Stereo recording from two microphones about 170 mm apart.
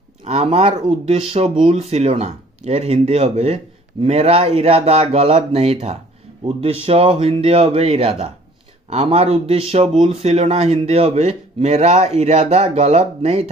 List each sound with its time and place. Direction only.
0.2 s a man's voice: 40° right (ahead or behind)